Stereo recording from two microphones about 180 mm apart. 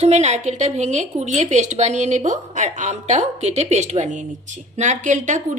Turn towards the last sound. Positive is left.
turn(degrees=-45)  # may be behind; listen again after turning